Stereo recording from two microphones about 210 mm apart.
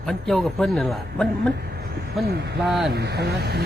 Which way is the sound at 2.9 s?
50° right (ahead or behind).